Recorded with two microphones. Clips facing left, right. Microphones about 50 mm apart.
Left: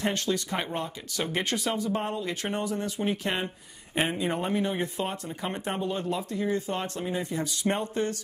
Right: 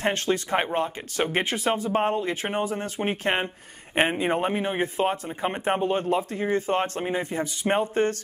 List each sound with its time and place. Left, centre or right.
0.0 s speech: right
2.4 s speech: right
2.7 s speech: right